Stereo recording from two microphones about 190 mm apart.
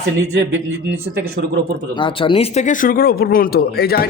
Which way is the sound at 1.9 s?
25° left (ahead or behind).